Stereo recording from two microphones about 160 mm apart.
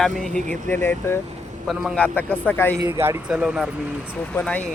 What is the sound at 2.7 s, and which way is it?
Speech, 15° right (ahead or behind).